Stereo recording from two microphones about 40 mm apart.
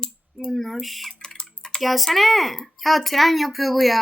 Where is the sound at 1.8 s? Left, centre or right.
Centre.